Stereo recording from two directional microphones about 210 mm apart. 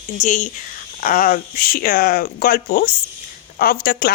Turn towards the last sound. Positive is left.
turn(degrees=45)  # may be behind; listen again after turning